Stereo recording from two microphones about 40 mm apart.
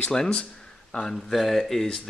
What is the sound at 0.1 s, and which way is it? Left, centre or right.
Speech, centre.